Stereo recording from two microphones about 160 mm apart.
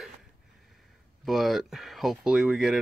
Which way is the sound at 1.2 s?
Centre (ahead or behind).